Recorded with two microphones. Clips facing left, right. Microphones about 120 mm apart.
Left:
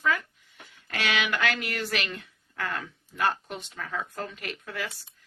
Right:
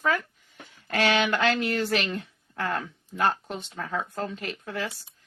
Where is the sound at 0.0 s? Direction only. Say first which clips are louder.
Right 2 dB; 45° right (ahead or behind).